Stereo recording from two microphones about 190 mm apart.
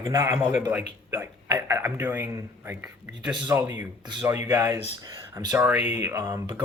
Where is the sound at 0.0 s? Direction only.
10° right (ahead or behind).